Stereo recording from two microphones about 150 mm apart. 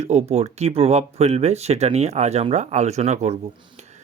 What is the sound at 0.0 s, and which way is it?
Speech, 45° right (ahead or behind).